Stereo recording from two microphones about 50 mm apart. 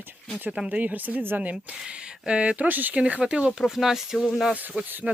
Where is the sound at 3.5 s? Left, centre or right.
Centre.